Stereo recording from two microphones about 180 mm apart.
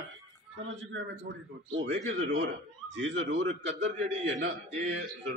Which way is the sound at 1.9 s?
90° right.